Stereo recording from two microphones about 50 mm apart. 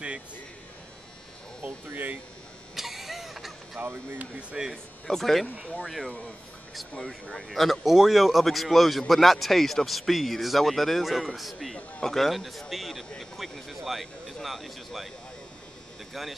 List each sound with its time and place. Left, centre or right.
2.7 s a sound: centre
3.8 s speech: right
5.0 s a man's voice: centre
16.1 s a man's voice: centre